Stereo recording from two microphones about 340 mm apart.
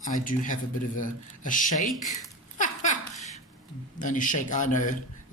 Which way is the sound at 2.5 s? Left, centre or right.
Left.